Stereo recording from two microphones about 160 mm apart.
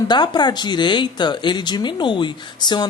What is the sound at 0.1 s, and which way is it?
Speech, 25° left (ahead or behind).